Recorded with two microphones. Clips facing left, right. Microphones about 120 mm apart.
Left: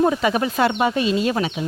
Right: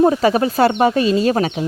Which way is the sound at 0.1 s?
35° right (ahead or behind).